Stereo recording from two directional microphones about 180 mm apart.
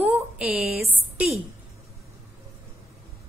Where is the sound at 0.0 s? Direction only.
10° right (ahead or behind).